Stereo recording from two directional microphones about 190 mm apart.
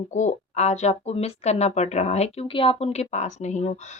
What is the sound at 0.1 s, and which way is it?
Speech, 40° left (ahead or behind).